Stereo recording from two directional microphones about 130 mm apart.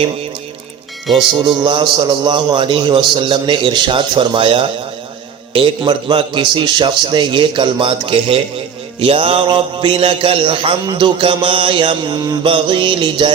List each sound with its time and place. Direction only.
1.5 s a man's voice: 40° right (ahead or behind)